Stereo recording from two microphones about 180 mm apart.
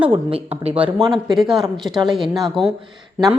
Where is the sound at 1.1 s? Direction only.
Centre (ahead or behind).